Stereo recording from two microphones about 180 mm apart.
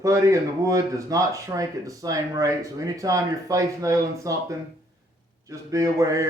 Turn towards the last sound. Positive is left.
turn(degrees=-20)  # may be behind; listen again after turning